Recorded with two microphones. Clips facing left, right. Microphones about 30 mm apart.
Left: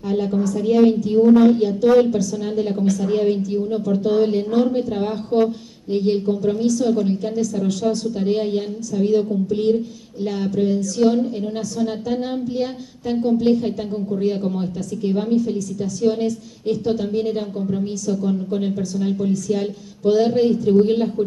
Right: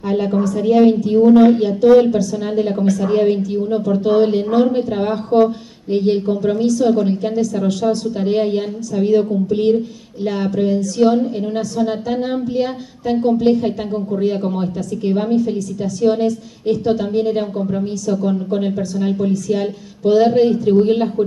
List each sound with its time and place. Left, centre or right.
0.1 s a woman's voice: right